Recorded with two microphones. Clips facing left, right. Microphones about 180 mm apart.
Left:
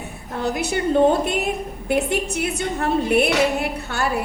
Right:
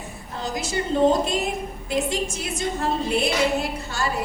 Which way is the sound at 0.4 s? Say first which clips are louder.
Left 5 dB; 60° left (ahead or behind).